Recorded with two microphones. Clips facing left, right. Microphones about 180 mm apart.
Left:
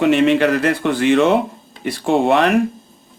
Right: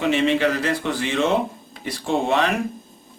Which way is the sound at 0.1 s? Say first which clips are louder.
Left 6 dB; 60° left (ahead or behind).